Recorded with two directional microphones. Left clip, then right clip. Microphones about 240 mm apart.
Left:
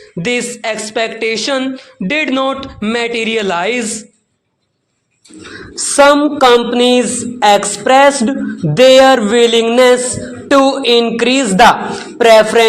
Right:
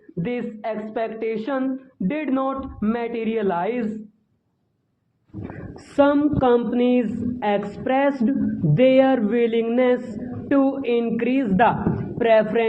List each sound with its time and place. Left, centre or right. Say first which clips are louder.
0.2 s speech: left 11 dB; left
6.0 s a sound: left 10 dB; centre
10.7 s speech: left 11 dB; left